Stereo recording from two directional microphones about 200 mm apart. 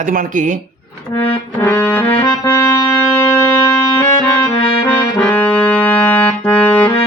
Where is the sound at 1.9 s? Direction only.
10° left (ahead or behind).